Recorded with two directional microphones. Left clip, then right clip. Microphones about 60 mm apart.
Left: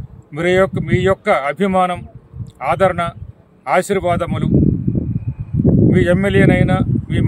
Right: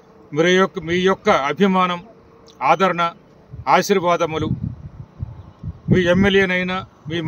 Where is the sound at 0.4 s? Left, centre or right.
Left.